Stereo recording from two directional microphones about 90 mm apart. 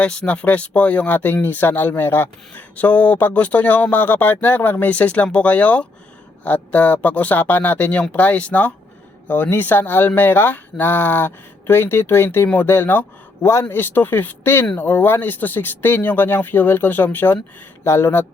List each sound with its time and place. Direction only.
0.0 s speech: 10° left (ahead or behind)